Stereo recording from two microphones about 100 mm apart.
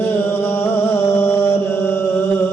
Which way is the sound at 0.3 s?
20° left (ahead or behind).